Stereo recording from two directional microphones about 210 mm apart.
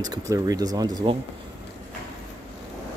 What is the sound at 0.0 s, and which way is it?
Speech, 15° right (ahead or behind).